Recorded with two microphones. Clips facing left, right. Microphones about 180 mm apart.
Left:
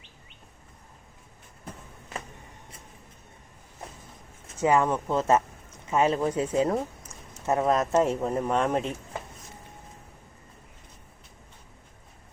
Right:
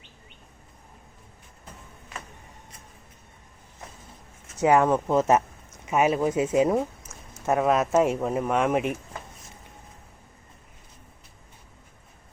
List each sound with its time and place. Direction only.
4.6 s speech: 15° right (ahead or behind)